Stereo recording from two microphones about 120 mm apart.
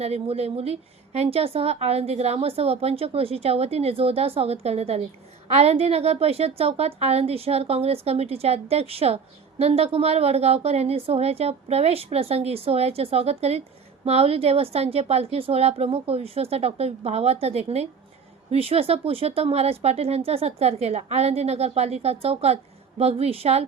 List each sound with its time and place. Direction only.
0.0 s a woman's voice: 60° right (ahead or behind)